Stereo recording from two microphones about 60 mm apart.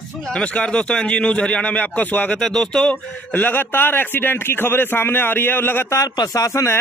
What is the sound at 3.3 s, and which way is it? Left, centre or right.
A man's voice, left.